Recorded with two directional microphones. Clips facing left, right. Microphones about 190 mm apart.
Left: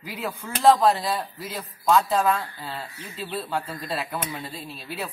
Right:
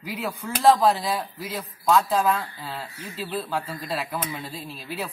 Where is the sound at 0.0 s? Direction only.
Centre (ahead or behind).